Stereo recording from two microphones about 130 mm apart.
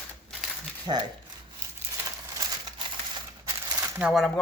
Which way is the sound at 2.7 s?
35° right (ahead or behind).